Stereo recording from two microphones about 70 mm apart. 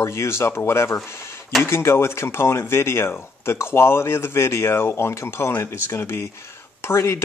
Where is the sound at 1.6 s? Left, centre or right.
Left.